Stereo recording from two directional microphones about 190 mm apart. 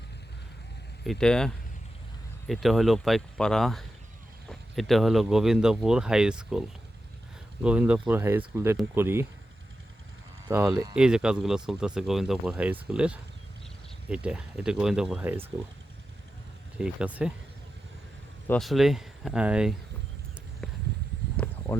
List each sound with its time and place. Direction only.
1.0 s speech: centre (ahead or behind)
10.5 s speech: 15° right (ahead or behind)
10.9 s speech: 5° right (ahead or behind)
16.7 s speech: 5° right (ahead or behind)
18.4 s speech: 5° left (ahead or behind)
21.3 s a sound: 10° left (ahead or behind)